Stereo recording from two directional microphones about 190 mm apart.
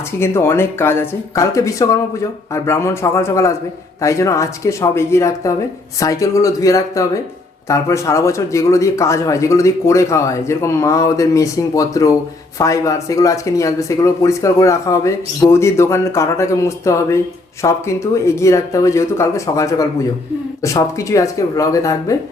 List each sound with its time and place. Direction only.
0.2 s speech: 15° left (ahead or behind)